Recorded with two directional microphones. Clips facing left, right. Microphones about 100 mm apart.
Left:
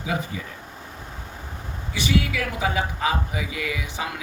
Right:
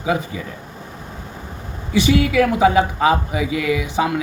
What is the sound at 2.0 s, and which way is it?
Speech, 90° right.